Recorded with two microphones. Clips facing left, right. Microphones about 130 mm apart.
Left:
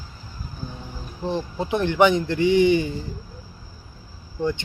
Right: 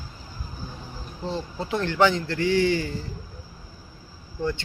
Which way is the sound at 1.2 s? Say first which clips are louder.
Left 4 dB; 20° left (ahead or behind).